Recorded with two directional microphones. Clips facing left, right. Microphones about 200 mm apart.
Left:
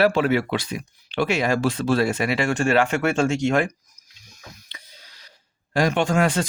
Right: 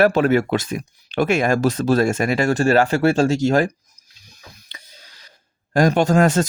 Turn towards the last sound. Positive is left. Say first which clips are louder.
# right 5 dB
turn(degrees=-40)  # may be behind; listen again after turning